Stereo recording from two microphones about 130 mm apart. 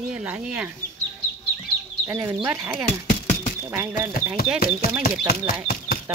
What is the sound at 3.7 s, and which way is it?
Speech, 15° right (ahead or behind).